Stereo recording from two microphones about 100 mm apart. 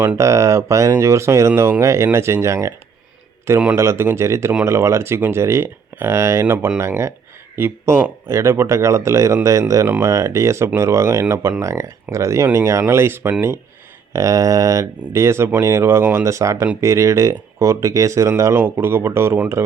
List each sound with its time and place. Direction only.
0.2 s speech: 30° right (ahead or behind)
3.8 s speech: 25° right (ahead or behind)
9.8 s speech: 20° right (ahead or behind)
10.1 s speech: 30° right (ahead or behind)